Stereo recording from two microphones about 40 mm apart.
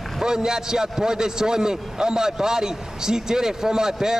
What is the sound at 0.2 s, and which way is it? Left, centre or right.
A man's voice, centre.